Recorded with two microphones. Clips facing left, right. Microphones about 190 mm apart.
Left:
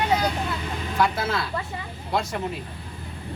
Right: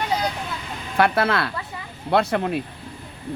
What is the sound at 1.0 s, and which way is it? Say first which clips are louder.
Speech: right 5 dB; 65° right (ahead or behind).